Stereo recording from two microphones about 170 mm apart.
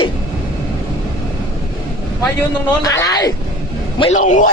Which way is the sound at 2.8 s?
20° left (ahead or behind).